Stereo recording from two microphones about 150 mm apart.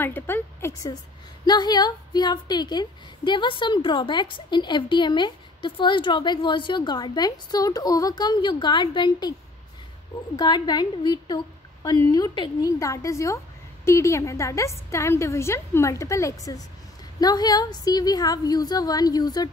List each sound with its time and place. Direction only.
0.0 s a woman's voice: 15° left (ahead or behind)
1.4 s a woman's voice: 30° left (ahead or behind)
10.3 s a woman's voice: 30° left (ahead or behind)